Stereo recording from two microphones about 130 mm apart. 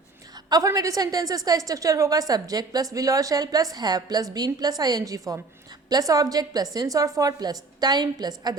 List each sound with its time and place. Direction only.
0.5 s a woman's voice: 25° right (ahead or behind)